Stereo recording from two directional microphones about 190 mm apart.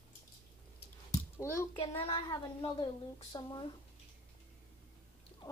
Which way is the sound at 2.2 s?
20° left (ahead or behind).